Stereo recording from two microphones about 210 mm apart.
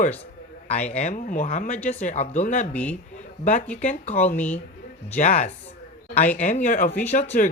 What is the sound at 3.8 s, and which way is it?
Speech, 35° left (ahead or behind).